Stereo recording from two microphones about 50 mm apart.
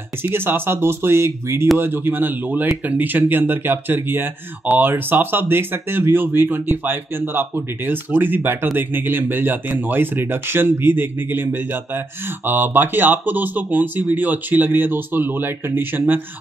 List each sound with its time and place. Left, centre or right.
0.2 s speech: right
1.8 s speech: right